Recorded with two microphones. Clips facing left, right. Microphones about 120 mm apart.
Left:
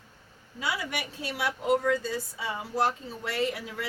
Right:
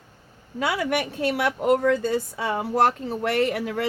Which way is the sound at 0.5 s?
60° right (ahead or behind).